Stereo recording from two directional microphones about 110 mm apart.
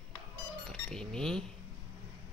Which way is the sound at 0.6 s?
5° left (ahead or behind).